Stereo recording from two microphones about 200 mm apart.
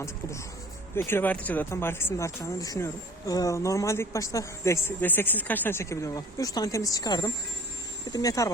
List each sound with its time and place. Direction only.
0.9 s speech: 10° left (ahead or behind)